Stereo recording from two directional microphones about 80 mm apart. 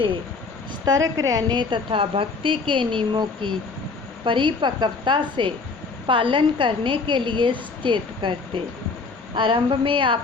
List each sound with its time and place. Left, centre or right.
0.9 s a woman's voice: right